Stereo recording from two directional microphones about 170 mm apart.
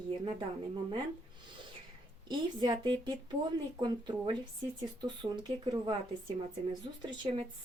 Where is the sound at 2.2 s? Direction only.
25° right (ahead or behind).